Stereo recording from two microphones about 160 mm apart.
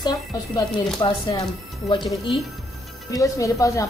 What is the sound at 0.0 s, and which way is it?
A woman's voice, 25° left (ahead or behind).